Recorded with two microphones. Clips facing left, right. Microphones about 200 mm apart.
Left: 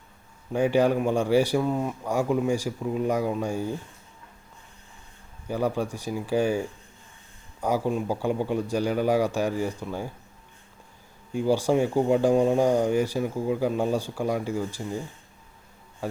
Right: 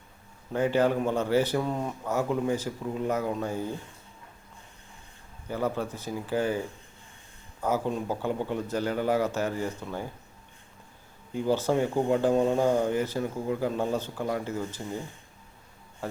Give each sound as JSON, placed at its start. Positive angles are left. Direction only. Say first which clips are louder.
{"t": 0.5, "sound": "speech", "louder": "left 3 dB", "side_deg": 15}
{"t": 5.5, "sound": "speech", "louder": "left 3 dB", "side_deg": 15}
{"t": 7.6, "sound": "speech", "louder": "left 3 dB", "side_deg": 10}
{"t": 11.3, "sound": "speech", "louder": "left 3 dB", "side_deg": 15}